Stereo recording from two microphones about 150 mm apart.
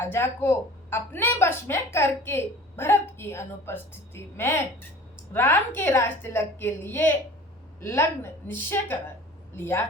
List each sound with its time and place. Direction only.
0.0 s a woman's voice: 15° left (ahead or behind)